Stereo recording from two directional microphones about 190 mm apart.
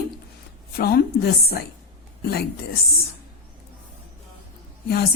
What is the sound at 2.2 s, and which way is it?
Speech, 55° left (ahead or behind).